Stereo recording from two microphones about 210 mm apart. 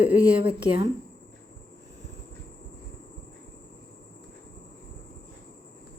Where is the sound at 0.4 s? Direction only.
25° right (ahead or behind).